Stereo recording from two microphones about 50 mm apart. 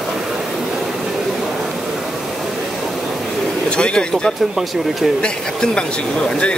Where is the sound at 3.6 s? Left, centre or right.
Centre.